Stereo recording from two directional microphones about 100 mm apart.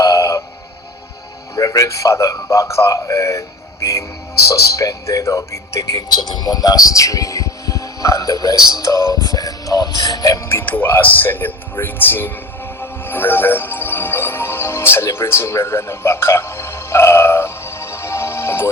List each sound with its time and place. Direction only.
0.0 s music: 30° left (ahead or behind)
1.5 s speech: 35° left (ahead or behind)
8.7 s music: 35° left (ahead or behind)
10.5 s speech: 20° left (ahead or behind)
12.8 s music: 20° left (ahead or behind)